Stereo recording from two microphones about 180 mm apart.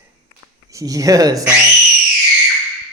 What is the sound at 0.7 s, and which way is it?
Speech, 20° right (ahead or behind).